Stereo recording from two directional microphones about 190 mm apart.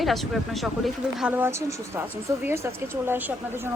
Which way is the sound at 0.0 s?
Centre (ahead or behind).